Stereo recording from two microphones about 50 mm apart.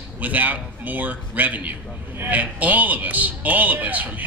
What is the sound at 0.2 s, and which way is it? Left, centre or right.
A man's voice, right.